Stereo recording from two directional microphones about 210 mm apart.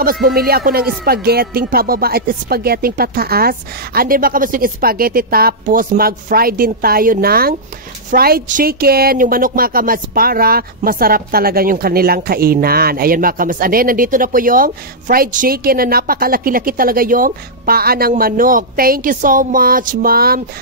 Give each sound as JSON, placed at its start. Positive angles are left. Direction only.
{"t": 0.0, "sound": "speech", "side_deg": -45}